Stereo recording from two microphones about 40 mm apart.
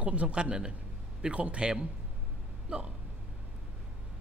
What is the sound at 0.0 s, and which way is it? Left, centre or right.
Speech, right.